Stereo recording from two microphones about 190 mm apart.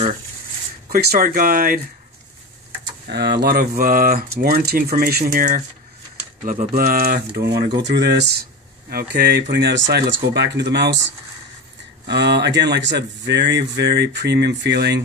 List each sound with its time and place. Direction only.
0.8 s speech: 50° right (ahead or behind)
3.1 s speech: 60° right (ahead or behind)
12.1 s speech: 60° right (ahead or behind)